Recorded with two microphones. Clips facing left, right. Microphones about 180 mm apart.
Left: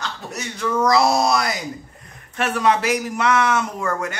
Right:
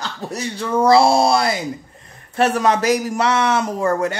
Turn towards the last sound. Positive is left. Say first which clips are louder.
# right 6 dB
turn(degrees=-35)  # may be behind; listen again after turning